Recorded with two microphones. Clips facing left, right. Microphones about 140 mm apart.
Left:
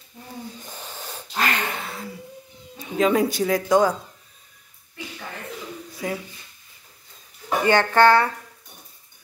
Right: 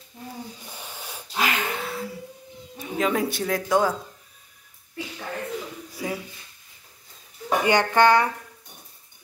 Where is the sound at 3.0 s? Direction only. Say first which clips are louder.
Left 5 dB; centre (ahead or behind).